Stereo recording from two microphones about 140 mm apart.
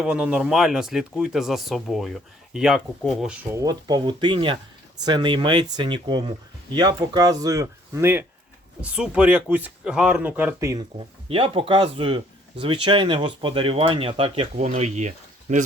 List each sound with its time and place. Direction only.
0.0 s speech: 5° right (ahead or behind)
3.5 s speech: 25° right (ahead or behind)
11.3 s speech: 40° right (ahead or behind)
14.5 s speech: 50° right (ahead or behind)